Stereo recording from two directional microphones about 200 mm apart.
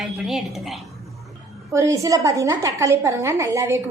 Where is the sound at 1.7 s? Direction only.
15° right (ahead or behind).